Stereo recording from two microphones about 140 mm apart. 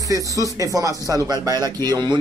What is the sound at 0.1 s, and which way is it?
Speech, 25° right (ahead or behind).